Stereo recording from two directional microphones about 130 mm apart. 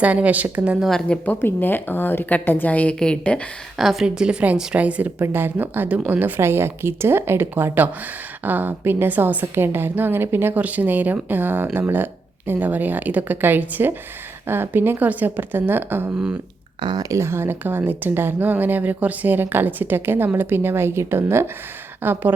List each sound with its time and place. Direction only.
0.0 s a woman's voice: 10° right (ahead or behind)
0.9 s a woman's voice: 5° left (ahead or behind)
16.8 s a woman's voice: 30° right (ahead or behind)